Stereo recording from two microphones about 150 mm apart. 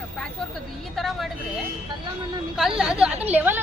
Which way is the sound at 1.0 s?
Centre (ahead or behind).